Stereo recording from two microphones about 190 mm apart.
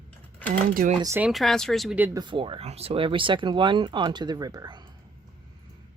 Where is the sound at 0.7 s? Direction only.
50° right (ahead or behind).